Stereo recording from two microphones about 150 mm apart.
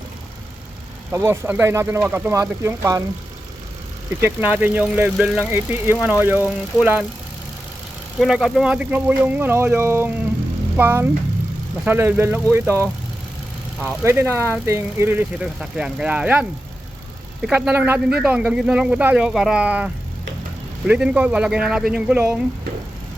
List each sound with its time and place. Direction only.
1.1 s speech: 15° right (ahead or behind)
4.2 s speech: 15° right (ahead or behind)
8.2 s speech: 5° right (ahead or behind)
13.8 s speech: 15° right (ahead or behind)